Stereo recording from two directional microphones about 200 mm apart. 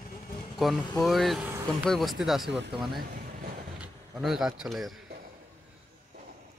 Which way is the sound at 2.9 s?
45° right (ahead or behind).